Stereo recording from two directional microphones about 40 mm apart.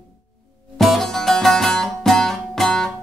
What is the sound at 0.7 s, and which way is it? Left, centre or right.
Music, centre.